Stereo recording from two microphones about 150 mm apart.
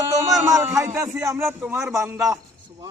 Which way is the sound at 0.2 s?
20° right (ahead or behind).